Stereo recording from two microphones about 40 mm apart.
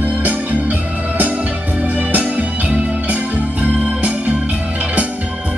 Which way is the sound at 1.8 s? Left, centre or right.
Right.